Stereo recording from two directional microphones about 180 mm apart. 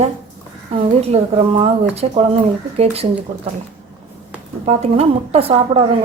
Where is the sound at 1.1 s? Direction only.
35° right (ahead or behind).